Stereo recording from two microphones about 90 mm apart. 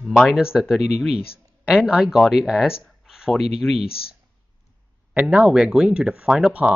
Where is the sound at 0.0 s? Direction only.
5° right (ahead or behind).